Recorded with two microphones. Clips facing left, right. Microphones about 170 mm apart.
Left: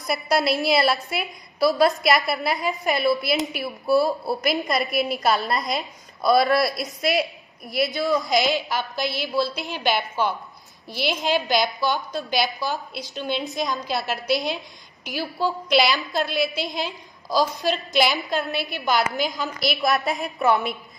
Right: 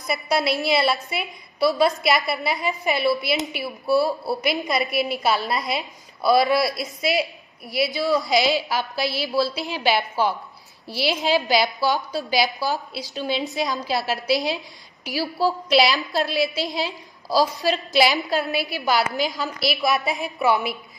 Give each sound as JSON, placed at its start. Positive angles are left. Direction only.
{"t": 0.0, "sound": "a woman's voice", "side_deg": 0}
{"t": 9.0, "sound": "a woman's voice", "side_deg": -35}
{"t": 9.3, "sound": "a woman's voice", "side_deg": 0}
{"t": 12.6, "sound": "a woman's voice", "side_deg": -35}
{"t": 13.1, "sound": "a woman's voice", "side_deg": 0}